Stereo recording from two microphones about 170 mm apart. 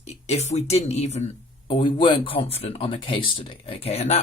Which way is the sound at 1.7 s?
30° left (ahead or behind).